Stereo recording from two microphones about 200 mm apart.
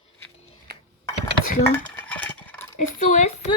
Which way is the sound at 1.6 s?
10° left (ahead or behind).